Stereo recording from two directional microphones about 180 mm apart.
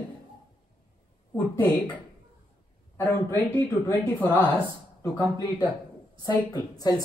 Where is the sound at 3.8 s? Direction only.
10° left (ahead or behind).